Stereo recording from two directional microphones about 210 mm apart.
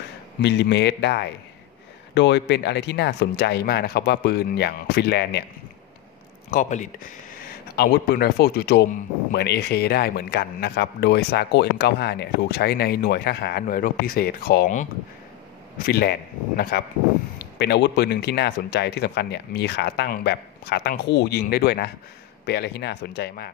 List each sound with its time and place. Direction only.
0.4 s speech: 55° left (ahead or behind)
6.5 s speech: 35° left (ahead or behind)